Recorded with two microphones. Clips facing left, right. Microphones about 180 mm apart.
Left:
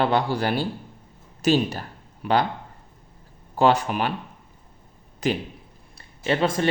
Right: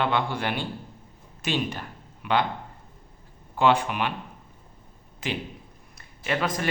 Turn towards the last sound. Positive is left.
turn(degrees=30)  # may be behind; listen again after turning